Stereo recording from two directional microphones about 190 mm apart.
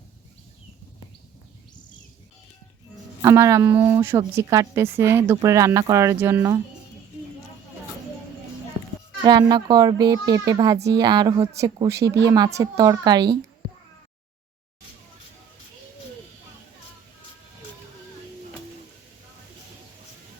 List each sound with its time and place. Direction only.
3.2 s speech: 15° right (ahead or behind)
9.2 s a child's voice: 20° right (ahead or behind)